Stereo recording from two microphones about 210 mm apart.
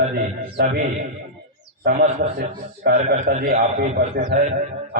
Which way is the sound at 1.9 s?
45° right (ahead or behind).